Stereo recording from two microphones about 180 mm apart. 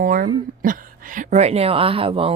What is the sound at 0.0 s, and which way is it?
Speech, 50° right (ahead or behind).